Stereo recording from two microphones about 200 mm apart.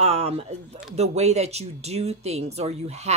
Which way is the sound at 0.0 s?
30° right (ahead or behind).